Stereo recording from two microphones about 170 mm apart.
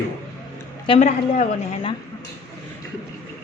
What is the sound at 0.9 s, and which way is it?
A woman's voice, 40° left (ahead or behind).